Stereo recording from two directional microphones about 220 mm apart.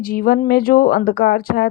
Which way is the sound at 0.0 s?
40° left (ahead or behind).